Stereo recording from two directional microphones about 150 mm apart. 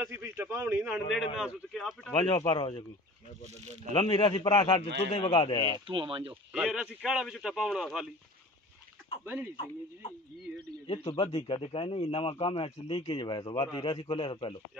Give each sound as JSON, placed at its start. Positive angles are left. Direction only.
{"t": 0.0, "sound": "a man's voice", "side_deg": -15}
{"t": 2.3, "sound": "speech", "side_deg": 25}
{"t": 3.9, "sound": "speech", "side_deg": 35}
{"t": 5.9, "sound": "speech", "side_deg": -35}
{"t": 6.5, "sound": "speech", "side_deg": -5}
{"t": 9.2, "sound": "speech", "side_deg": -15}
{"t": 10.9, "sound": "speech", "side_deg": 35}